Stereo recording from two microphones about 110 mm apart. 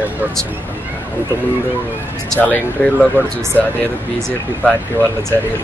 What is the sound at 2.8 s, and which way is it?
Speech, 10° left (ahead or behind).